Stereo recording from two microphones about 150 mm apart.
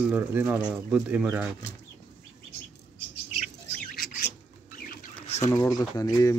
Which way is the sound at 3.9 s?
90° left.